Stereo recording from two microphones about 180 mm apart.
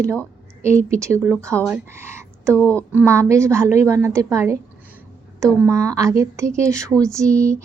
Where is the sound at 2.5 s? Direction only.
10° left (ahead or behind).